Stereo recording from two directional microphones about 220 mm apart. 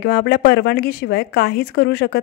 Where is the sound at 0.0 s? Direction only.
45° left (ahead or behind).